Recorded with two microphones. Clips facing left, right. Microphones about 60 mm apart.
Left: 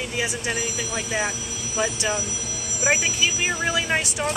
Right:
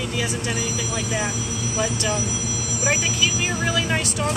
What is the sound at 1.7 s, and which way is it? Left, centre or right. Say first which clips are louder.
Speech: even; left.